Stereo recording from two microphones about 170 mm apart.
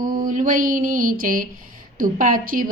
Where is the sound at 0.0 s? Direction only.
55° right (ahead or behind).